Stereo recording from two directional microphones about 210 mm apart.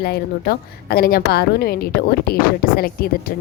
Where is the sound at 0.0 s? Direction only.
50° left (ahead or behind).